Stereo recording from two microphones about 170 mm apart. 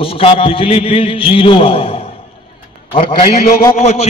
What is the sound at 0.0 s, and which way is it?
A man's voice, 35° left (ahead or behind).